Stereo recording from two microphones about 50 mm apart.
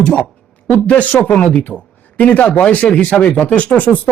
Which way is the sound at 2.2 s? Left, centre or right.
Left.